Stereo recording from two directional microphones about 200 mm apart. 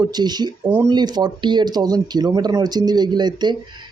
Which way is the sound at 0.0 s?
20° right (ahead or behind).